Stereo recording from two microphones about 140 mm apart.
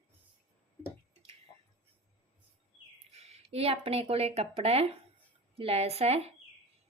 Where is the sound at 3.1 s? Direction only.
45° right (ahead or behind).